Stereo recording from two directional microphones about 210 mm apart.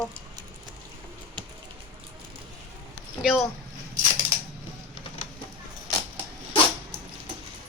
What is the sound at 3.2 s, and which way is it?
Speech, 5° right (ahead or behind).